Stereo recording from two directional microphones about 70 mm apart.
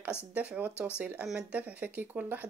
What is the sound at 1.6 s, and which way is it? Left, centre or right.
Speech, right.